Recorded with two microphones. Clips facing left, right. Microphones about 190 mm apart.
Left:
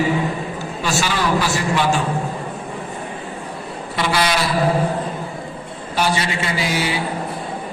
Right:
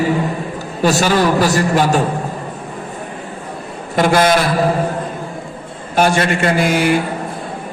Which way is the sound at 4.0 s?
50° right (ahead or behind).